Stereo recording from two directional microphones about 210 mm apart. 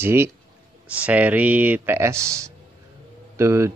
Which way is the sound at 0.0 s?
10° right (ahead or behind).